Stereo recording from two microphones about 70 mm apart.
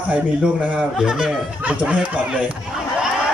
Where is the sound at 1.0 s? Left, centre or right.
Centre.